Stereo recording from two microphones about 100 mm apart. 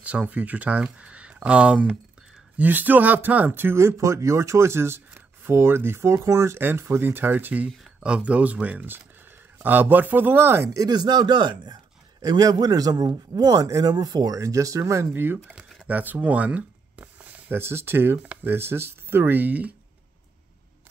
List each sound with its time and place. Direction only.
0.0 s speech: 15° right (ahead or behind)